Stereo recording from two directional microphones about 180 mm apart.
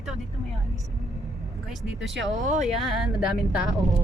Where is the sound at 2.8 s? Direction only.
Centre (ahead or behind).